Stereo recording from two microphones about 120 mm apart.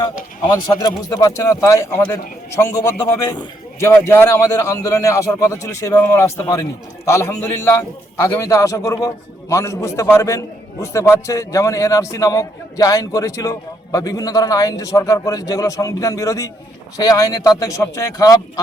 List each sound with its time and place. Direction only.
0.4 s a man's voice: 30° left (ahead or behind)